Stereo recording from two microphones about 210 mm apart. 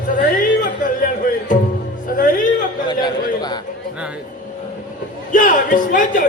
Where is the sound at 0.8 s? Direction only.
40° left (ahead or behind).